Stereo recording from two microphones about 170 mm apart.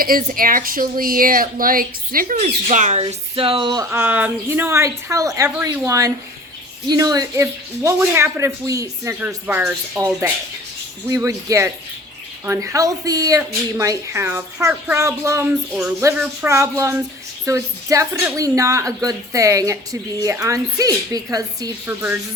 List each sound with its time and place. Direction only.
0.0 s speech: 55° right (ahead or behind)
2.4 s speech: 45° right (ahead or behind); by 3.8 s 25° right (ahead or behind)
3.8 s speech: 10° right (ahead or behind)
11.1 s speech: 20° right (ahead or behind)